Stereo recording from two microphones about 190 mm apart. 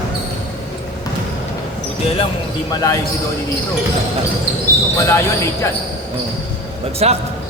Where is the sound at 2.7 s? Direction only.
20° left (ahead or behind).